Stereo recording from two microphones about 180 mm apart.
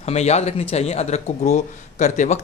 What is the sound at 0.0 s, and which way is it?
Speech, 35° left (ahead or behind).